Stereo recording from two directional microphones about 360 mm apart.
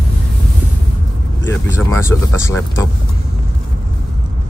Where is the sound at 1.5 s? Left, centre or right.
Centre.